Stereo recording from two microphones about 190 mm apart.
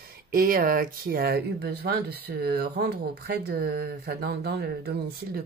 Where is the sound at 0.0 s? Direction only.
50° right (ahead or behind).